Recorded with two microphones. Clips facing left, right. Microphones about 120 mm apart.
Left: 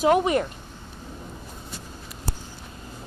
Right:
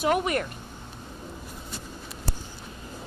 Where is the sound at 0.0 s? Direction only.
25° left (ahead or behind).